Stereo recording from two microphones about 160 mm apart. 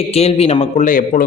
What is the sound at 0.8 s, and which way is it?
Speech, 55° left (ahead or behind).